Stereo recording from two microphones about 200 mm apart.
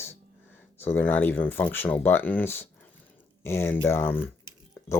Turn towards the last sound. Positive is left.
turn(degrees=10)  # may be behind; listen again after turning